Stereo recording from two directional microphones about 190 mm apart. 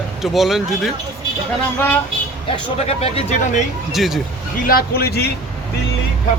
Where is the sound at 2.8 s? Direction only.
30° left (ahead or behind).